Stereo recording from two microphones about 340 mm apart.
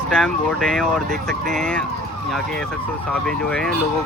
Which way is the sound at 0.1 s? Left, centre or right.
Centre.